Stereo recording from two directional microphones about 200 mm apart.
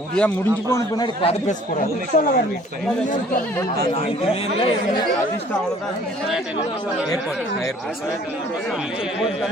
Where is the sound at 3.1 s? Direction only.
45° left (ahead or behind).